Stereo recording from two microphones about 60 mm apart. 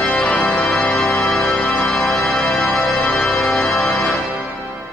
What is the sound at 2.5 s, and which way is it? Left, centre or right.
Music, centre.